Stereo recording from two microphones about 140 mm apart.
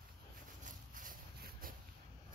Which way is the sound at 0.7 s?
75° right (ahead or behind).